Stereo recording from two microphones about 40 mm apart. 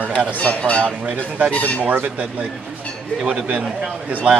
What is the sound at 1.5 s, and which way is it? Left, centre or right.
Speech, left.